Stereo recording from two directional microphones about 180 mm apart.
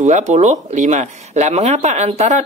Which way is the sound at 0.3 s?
40° right (ahead or behind).